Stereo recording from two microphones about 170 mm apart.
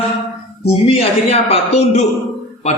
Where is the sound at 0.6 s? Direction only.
35° left (ahead or behind).